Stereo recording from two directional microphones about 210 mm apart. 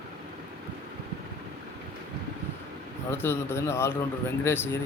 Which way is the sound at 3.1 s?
10° left (ahead or behind).